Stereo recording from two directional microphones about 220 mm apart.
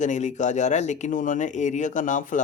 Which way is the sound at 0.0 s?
35° left (ahead or behind).